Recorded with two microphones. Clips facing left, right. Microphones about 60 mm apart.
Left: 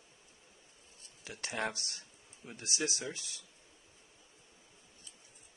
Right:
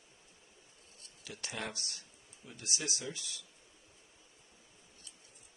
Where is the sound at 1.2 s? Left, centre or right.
Left.